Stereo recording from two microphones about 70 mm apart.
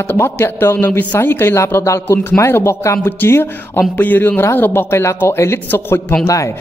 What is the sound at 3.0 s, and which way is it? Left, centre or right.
A man's voice, left.